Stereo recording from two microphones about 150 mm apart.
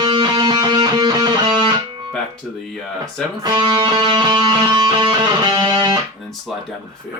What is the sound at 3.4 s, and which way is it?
Music, 25° right (ahead or behind).